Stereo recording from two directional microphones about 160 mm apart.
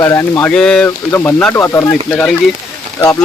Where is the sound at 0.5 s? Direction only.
5° left (ahead or behind).